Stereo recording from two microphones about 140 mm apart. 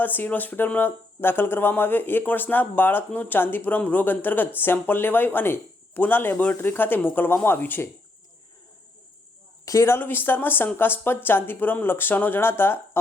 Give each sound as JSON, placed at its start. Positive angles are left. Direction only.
{"t": 0.0, "sound": "speech", "side_deg": 15}
{"t": 9.6, "sound": "speech", "side_deg": 20}